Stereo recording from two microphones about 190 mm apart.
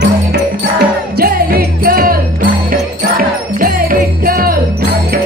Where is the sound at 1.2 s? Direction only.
55° right (ahead or behind).